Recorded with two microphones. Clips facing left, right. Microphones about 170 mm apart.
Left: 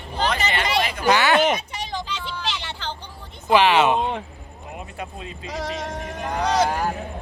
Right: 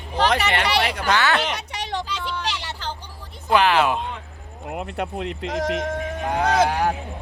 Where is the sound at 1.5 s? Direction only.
75° right (ahead or behind).